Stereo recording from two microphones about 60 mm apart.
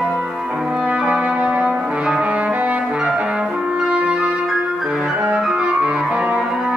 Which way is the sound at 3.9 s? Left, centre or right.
Centre.